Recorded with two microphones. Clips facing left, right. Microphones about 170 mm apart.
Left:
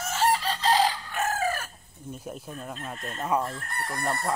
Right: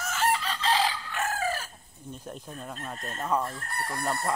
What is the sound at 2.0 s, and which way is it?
Chicken, 5° left (ahead or behind).